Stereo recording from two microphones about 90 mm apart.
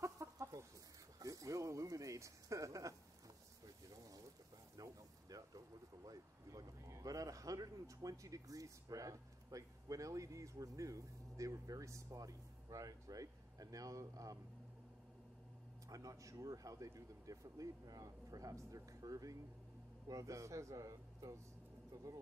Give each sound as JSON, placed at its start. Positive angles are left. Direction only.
{"t": 0.0, "sound": "chicken", "side_deg": -40}
{"t": 1.2, "sound": "a sound", "side_deg": -40}
{"t": 6.0, "sound": "a man's voice", "side_deg": -40}
{"t": 15.9, "sound": "speech", "side_deg": -40}